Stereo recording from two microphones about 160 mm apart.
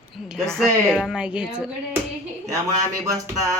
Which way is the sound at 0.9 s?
5° left (ahead or behind).